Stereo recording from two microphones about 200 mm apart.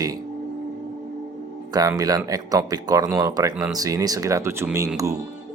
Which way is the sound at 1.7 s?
20° right (ahead or behind).